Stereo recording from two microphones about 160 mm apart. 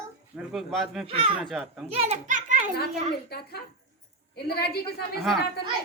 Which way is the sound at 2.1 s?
50° right (ahead or behind).